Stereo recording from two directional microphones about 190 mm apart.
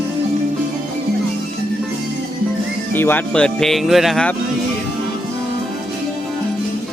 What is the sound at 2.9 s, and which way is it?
Speech, 10° left (ahead or behind).